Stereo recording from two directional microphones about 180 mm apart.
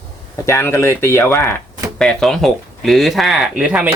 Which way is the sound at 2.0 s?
Centre (ahead or behind).